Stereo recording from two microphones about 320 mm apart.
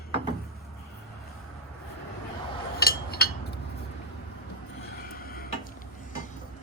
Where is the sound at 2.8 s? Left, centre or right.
Left.